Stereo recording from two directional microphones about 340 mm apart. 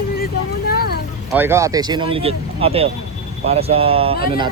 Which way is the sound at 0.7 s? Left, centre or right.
Left.